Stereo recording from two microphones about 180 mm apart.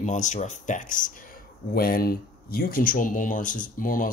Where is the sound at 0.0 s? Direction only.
40° left (ahead or behind).